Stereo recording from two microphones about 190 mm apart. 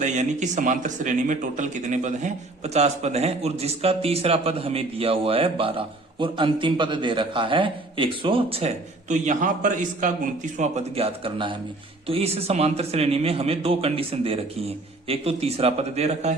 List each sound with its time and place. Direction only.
0.0 s speech: 40° right (ahead or behind)